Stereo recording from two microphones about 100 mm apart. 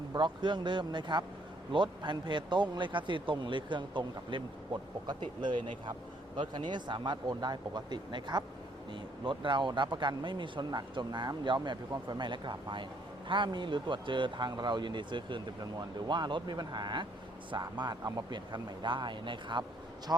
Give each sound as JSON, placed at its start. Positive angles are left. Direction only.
{"t": 0.2, "sound": "speech", "side_deg": -50}
{"t": 20.1, "sound": "speech", "side_deg": -30}